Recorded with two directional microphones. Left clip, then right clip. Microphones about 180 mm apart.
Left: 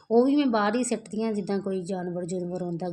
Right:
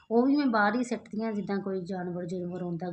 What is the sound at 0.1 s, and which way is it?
A woman's voice, 25° left (ahead or behind).